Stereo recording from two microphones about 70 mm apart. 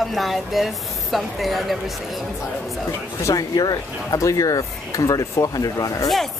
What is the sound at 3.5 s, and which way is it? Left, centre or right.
Speech, left.